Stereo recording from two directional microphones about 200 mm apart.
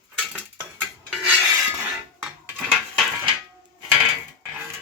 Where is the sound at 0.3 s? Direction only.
10° right (ahead or behind).